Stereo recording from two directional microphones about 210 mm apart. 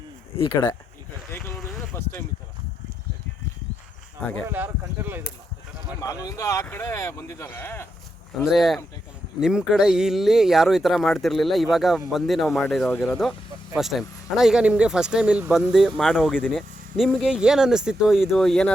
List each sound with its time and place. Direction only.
0.3 s speech: 20° left (ahead or behind)
1.3 s a sound: 10° left (ahead or behind)
4.4 s speech: 10° right (ahead or behind)
6.2 s speech: 15° left (ahead or behind)
8.4 s speech: centre (ahead or behind)